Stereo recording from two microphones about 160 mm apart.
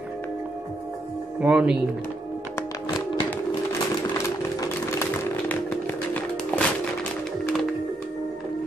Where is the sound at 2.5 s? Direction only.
25° left (ahead or behind).